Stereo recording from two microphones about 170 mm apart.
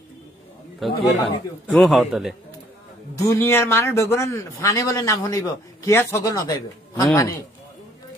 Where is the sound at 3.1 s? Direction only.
15° left (ahead or behind).